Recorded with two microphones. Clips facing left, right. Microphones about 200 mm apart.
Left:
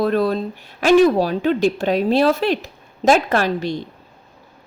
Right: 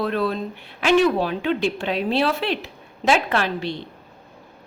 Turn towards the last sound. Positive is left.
turn(degrees=45)  # may be behind; listen again after turning